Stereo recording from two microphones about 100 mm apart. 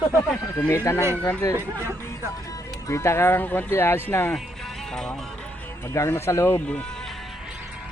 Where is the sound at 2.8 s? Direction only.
30° left (ahead or behind).